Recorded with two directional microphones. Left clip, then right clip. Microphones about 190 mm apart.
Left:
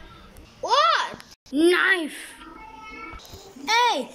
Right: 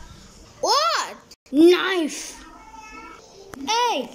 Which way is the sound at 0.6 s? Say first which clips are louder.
Even; 10° right (ahead or behind).